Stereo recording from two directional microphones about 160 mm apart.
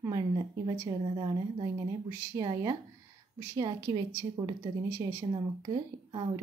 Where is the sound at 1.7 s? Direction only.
20° right (ahead or behind).